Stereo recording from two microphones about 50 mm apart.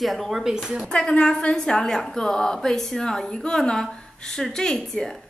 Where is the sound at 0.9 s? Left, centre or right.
Left.